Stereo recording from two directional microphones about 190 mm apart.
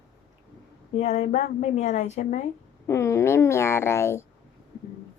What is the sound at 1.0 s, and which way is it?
A woman's voice, 40° left (ahead or behind).